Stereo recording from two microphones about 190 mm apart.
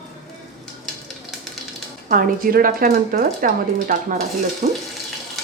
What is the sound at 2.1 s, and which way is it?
Speech, 50° right (ahead or behind).